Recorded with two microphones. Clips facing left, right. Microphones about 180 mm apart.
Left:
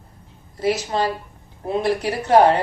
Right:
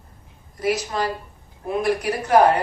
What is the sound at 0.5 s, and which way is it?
A woman's voice, 25° left (ahead or behind).